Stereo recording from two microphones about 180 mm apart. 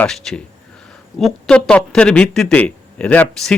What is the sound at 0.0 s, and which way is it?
Speech, centre (ahead or behind).